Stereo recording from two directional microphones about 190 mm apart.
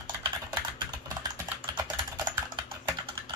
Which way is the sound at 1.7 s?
25° right (ahead or behind).